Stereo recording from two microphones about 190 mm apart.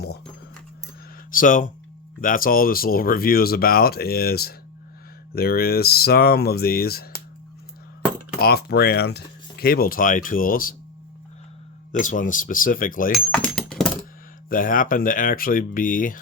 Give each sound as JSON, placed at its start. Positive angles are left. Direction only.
{"t": 1.3, "sound": "speech", "side_deg": 45}
{"t": 8.4, "sound": "speech", "side_deg": 55}
{"t": 11.9, "sound": "speech", "side_deg": 40}
{"t": 13.1, "sound": "a sound", "side_deg": 5}
{"t": 14.5, "sound": "speech", "side_deg": 45}